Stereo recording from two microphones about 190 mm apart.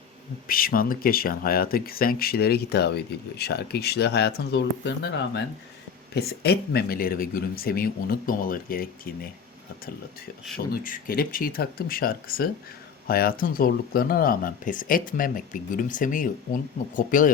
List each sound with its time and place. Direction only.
0.4 s speech: 50° left (ahead or behind)
10.7 s speech: 45° left (ahead or behind)